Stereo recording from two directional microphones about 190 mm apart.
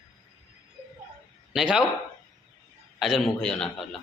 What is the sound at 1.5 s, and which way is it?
Speech, 5° right (ahead or behind).